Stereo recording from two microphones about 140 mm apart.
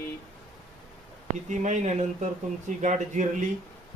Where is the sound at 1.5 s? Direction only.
60° right (ahead or behind).